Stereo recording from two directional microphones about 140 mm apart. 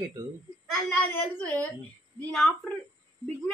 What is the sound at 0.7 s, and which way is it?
Speech, 5° left (ahead or behind).